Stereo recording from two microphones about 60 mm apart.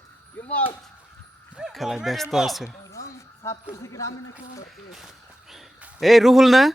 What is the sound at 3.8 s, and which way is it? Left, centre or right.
Speech, left.